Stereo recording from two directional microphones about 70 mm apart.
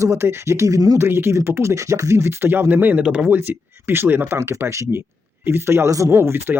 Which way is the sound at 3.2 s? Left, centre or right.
Right.